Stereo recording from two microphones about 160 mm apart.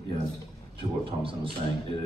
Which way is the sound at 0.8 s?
35° right (ahead or behind).